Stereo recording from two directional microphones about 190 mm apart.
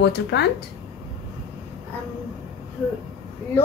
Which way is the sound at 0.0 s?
65° left (ahead or behind).